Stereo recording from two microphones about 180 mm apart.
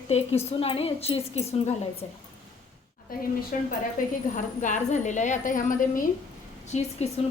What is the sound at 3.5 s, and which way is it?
A woman's voice, 50° left (ahead or behind).